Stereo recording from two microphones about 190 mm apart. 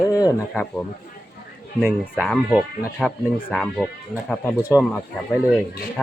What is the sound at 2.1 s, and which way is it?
Speech, 5° right (ahead or behind).